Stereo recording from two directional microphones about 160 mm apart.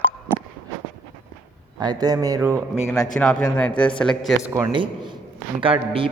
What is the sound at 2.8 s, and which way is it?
Speech, 15° left (ahead or behind).